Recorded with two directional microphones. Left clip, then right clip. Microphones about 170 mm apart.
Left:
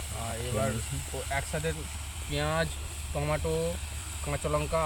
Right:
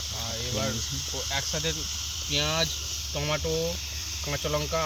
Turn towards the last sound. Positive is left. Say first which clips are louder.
# right 1 dB
turn(degrees=-15)  # may be behind; listen again after turning